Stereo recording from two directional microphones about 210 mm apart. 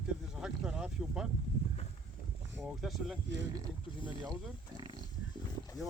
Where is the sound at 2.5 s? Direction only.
Centre (ahead or behind).